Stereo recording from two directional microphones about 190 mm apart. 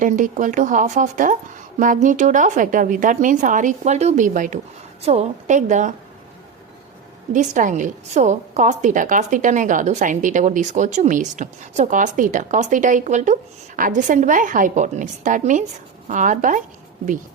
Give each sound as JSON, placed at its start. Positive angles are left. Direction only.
{"t": 0.0, "sound": "a woman's voice", "side_deg": -45}
{"t": 7.3, "sound": "a woman's voice", "side_deg": -40}